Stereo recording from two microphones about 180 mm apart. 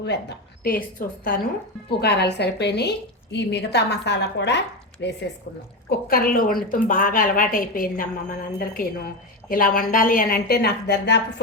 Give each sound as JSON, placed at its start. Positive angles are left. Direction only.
{"t": 0.0, "sound": "a woman's voice", "side_deg": 70}
{"t": 6.1, "sound": "a woman's voice", "side_deg": 55}